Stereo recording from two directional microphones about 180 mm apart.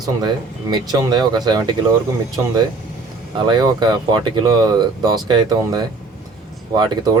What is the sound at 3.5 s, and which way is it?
Speech, 25° right (ahead or behind).